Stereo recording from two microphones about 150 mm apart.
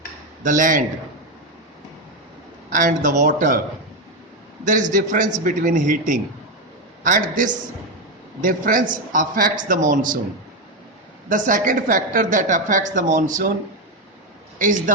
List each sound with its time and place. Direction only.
0.4 s a woman's voice: 60° right (ahead or behind)
2.6 s a woman's voice: 60° right (ahead or behind)
4.6 s a woman's voice: 60° right (ahead or behind)
11.3 s a woman's voice: 60° right (ahead or behind)
14.6 s a woman's voice: 60° right (ahead or behind)